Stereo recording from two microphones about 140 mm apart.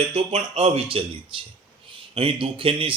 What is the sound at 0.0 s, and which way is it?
A man's voice, 50° right (ahead or behind).